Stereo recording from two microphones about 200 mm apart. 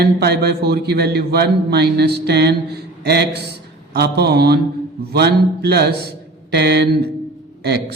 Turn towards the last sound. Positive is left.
turn(degrees=-55)  # may be behind; listen again after turning